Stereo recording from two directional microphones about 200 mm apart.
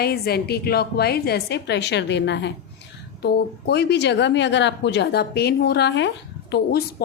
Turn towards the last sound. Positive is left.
turn(degrees=60)  # may be behind; listen again after turning